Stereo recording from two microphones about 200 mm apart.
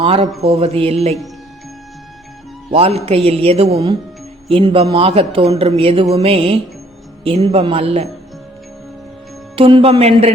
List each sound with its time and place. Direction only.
0.0 s speech: 30° right (ahead or behind)
2.6 s speech: 30° right (ahead or behind)
9.6 s speech: 25° right (ahead or behind)